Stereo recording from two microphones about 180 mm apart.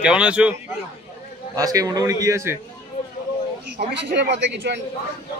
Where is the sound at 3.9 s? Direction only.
75° right (ahead or behind).